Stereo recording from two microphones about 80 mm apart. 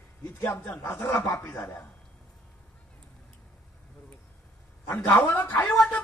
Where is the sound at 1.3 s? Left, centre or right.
Left.